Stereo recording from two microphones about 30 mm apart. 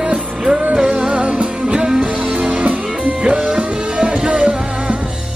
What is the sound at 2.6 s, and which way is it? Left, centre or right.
Music, right.